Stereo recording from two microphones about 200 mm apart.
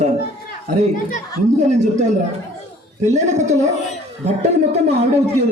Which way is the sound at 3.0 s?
35° right (ahead or behind).